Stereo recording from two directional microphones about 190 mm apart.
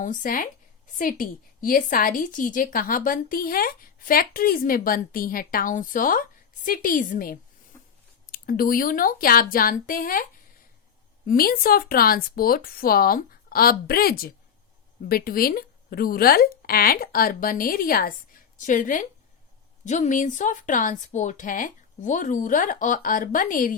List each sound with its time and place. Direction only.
0.0 s a woman's voice: 45° left (ahead or behind)
11.3 s a woman's voice: 50° left (ahead or behind)